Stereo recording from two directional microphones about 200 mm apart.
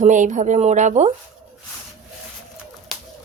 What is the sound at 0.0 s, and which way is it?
Speech, 40° right (ahead or behind).